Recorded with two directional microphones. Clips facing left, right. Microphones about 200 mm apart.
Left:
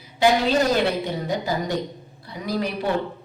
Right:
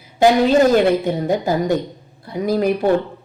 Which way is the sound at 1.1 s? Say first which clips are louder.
Right 7 dB; 50° right (ahead or behind).